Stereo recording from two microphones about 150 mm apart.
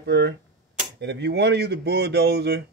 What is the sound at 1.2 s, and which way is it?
Speech, 90° right.